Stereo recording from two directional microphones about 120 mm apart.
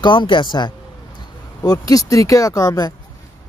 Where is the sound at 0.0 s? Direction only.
40° left (ahead or behind).